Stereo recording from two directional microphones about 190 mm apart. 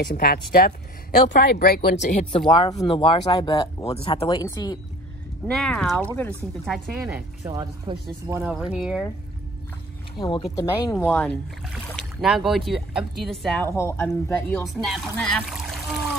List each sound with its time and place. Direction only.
0.0 s speech: 50° left (ahead or behind)
1.9 s speech: 40° left (ahead or behind); by 4.7 s 20° left (ahead or behind)
5.5 s speech: centre (ahead or behind)
7.0 s speech: 15° right (ahead or behind)
10.2 s speech: 20° left (ahead or behind)
11.1 s speech: 5° left (ahead or behind)
13.7 s speech: 15° left (ahead or behind)